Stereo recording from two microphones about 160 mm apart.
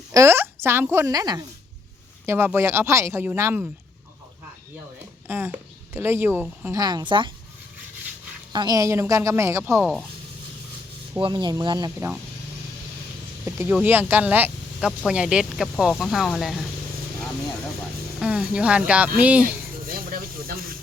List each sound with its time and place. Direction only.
0.1 s a woman's voice: 20° right (ahead or behind)
5.3 s speech: 15° right (ahead or behind); by 7.3 s 30° right (ahead or behind)
8.5 s speech: 25° right (ahead or behind)
9.8 s speech: centre (ahead or behind)
11.2 s speech: 30° right (ahead or behind)
13.4 s speech: 15° right (ahead or behind)
18.2 s speech: 5° right (ahead or behind)
19.9 s speech: 65° right (ahead or behind)